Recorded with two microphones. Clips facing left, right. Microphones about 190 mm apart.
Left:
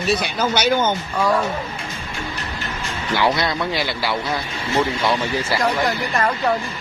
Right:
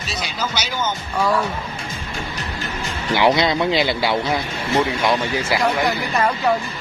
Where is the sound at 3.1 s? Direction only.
20° right (ahead or behind).